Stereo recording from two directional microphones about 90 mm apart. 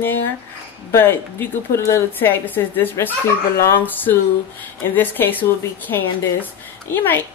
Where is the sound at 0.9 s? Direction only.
25° left (ahead or behind).